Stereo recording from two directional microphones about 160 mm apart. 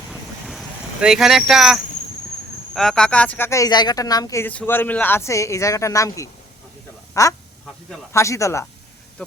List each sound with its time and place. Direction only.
0.1 s boat: centre (ahead or behind)
1.0 s speech: 5° right (ahead or behind); by 8.6 s 20° left (ahead or behind)